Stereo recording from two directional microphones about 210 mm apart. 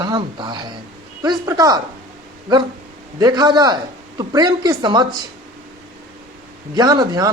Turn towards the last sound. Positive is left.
turn(degrees=-20)  # may be behind; listen again after turning